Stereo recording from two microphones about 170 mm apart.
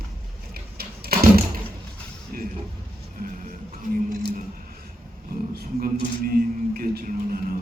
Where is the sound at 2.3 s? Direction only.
55° right (ahead or behind).